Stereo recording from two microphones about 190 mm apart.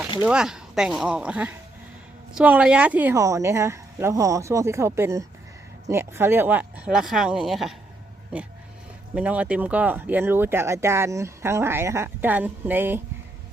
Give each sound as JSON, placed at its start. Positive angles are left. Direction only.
{"t": 0.2, "sound": "speech", "side_deg": -5}
{"t": 9.1, "sound": "speech", "side_deg": -5}